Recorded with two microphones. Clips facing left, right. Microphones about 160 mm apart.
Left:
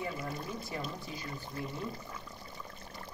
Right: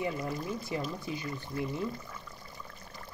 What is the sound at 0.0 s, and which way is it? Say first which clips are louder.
Speech: right 4 dB; 20° right (ahead or behind).